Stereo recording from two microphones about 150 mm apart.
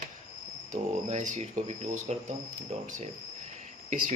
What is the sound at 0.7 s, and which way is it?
Speech, 55° right (ahead or behind).